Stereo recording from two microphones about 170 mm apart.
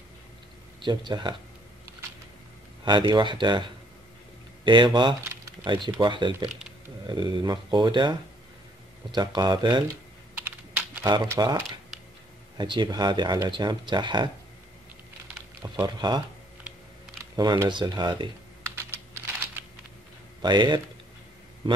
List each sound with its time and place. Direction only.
0.7 s speech: 25° right (ahead or behind)
2.8 s speech: 25° right (ahead or behind)
4.6 s speech: 30° right (ahead or behind)
5.3 s a sound: 15° right (ahead or behind)
5.9 s speech: 25° right (ahead or behind)
11.0 s speech: 20° right (ahead or behind)
11.9 s a sound: 5° right (ahead or behind)
12.5 s speech: 25° right (ahead or behind)
15.6 s speech: 25° right (ahead or behind)
17.4 s speech: 25° right (ahead or behind)
18.9 s computer keyboard: 15° right (ahead or behind)
20.4 s speech: 25° right (ahead or behind)